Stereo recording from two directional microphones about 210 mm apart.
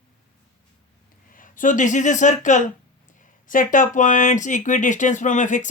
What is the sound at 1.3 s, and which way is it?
Speech, 40° left (ahead or behind).